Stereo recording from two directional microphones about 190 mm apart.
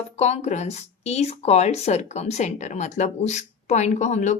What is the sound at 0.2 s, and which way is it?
Speech, 35° left (ahead or behind).